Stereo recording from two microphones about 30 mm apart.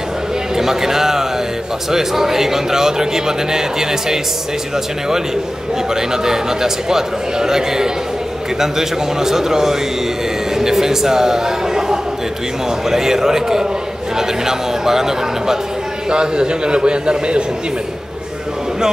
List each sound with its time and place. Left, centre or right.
0.6 s speech: centre
5.9 s a man's voice: centre
10.5 s a sound: centre
12.9 s speech: centre
16.1 s a man's voice: right